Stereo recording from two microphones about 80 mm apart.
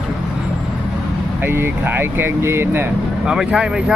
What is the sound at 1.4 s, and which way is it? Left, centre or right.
Speech, right.